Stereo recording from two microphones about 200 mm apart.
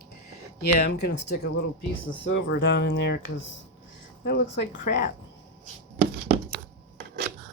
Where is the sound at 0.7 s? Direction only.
55° left (ahead or behind).